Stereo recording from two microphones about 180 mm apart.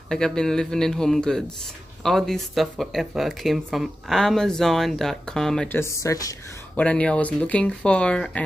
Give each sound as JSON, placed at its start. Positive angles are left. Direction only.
{"t": 0.1, "sound": "speech", "side_deg": 5}
{"t": 6.8, "sound": "speech", "side_deg": 5}